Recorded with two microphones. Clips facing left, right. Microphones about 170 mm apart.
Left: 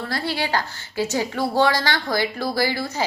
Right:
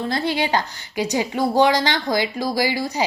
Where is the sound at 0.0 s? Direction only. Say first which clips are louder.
Right 4 dB; 20° right (ahead or behind).